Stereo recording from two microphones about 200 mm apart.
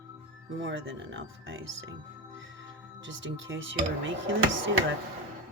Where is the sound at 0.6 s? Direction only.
70° right (ahead or behind).